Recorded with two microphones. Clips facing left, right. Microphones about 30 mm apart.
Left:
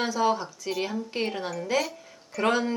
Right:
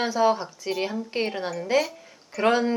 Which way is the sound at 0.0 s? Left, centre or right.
Centre.